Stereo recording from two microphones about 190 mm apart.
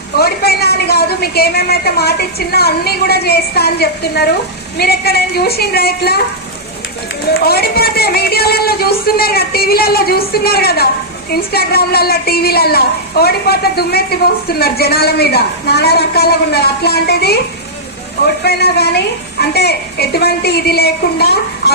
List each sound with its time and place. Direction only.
0.2 s a woman's voice: 55° left (ahead or behind)
7.3 s speech: 55° left (ahead or behind)
18.4 s speech: 60° left (ahead or behind)